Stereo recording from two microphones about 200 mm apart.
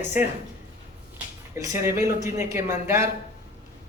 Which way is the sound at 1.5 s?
15° right (ahead or behind).